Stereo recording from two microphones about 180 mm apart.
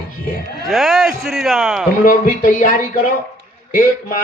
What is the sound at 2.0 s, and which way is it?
Speech, 50° left (ahead or behind).